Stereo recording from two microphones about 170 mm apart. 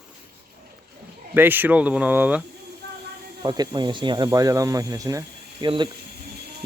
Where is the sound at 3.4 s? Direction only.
25° right (ahead or behind).